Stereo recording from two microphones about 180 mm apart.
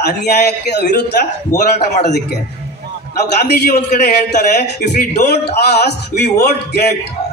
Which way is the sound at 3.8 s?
45° left (ahead or behind).